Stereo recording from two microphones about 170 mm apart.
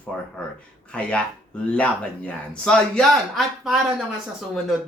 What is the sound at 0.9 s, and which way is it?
Speech, 5° left (ahead or behind).